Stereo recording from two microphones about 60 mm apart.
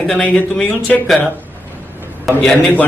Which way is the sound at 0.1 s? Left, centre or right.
Left.